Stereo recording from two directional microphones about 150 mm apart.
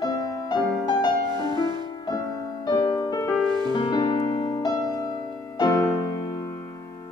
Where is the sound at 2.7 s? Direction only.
30° left (ahead or behind).